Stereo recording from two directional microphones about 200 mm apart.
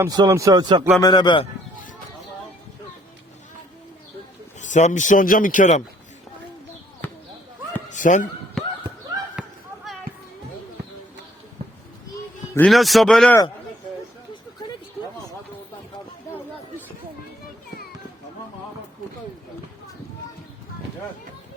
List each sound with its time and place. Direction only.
0.0 s speech: 15° right (ahead or behind)
1.0 s a man's voice: 20° left (ahead or behind)
4.6 s speech: 40° left (ahead or behind)
7.0 s basketball bounce: 10° left (ahead or behind)
7.9 s a sound: 40° left (ahead or behind)
8.6 s a sound: centre (ahead or behind)
12.5 s speech: centre (ahead or behind)